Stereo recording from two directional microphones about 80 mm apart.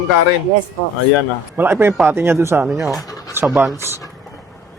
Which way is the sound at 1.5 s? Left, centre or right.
Right.